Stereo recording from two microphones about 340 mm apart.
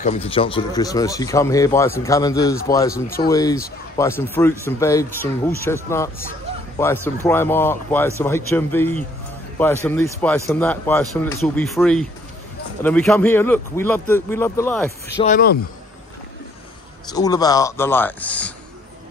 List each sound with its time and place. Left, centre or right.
0.0 s speech: centre
15.2 s speech: left
17.1 s speech: centre